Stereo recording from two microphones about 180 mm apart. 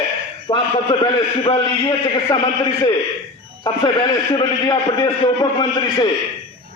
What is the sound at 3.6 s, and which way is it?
A man's voice, 25° left (ahead or behind).